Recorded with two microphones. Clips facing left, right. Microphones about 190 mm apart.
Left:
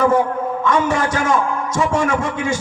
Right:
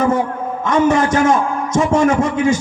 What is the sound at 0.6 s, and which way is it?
Speech, 20° right (ahead or behind).